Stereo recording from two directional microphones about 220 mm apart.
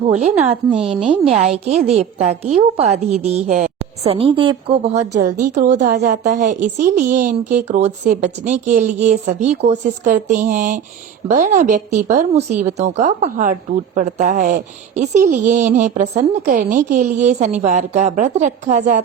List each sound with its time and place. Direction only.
0.1 s a woman's voice: 30° right (ahead or behind)
0.7 s a woman's voice: 5° right (ahead or behind)
2.0 s a woman's voice: 30° right (ahead or behind)